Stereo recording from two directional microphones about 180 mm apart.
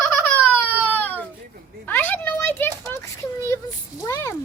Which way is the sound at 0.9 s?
10° left (ahead or behind).